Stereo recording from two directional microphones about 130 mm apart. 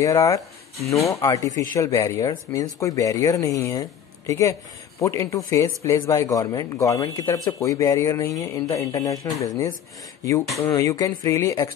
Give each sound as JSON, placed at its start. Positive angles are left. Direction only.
{"t": 0.0, "sound": "speech", "side_deg": 25}